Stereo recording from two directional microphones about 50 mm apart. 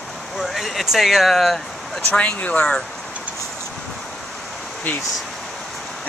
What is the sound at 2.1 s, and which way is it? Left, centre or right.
Speech, left.